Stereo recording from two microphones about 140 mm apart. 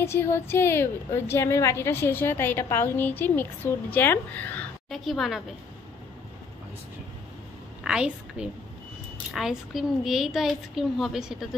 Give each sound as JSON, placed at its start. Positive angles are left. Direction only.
{"t": 0.0, "sound": "a woman's voice", "side_deg": 20}
{"t": 4.8, "sound": "a woman's voice", "side_deg": 0}
{"t": 7.8, "sound": "a woman's voice", "side_deg": -5}